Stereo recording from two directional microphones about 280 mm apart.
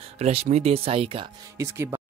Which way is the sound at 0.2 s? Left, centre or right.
Right.